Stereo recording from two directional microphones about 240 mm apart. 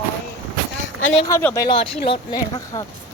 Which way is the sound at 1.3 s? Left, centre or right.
Centre.